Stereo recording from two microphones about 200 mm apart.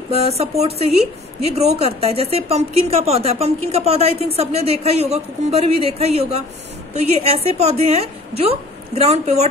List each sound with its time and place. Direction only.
0.1 s speech: 30° right (ahead or behind)